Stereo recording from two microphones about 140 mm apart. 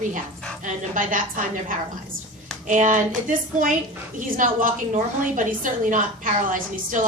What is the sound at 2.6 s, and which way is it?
A woman's voice, 60° right (ahead or behind).